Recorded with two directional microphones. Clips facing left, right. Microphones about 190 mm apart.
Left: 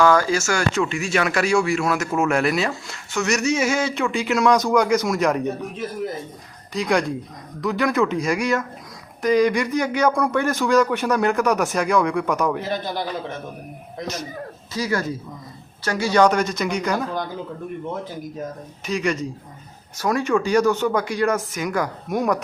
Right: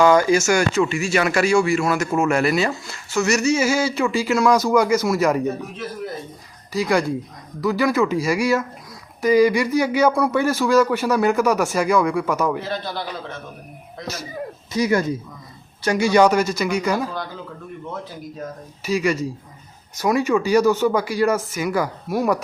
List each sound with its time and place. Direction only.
0.0 s speech: 20° right (ahead or behind)
0.7 s speech: centre (ahead or behind)
6.7 s speech: centre (ahead or behind)
12.5 s a man's voice: 15° left (ahead or behind)
14.7 s speech: 20° right (ahead or behind)
18.9 s speech: 5° right (ahead or behind)